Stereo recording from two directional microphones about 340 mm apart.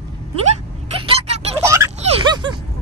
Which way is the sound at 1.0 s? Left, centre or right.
Centre.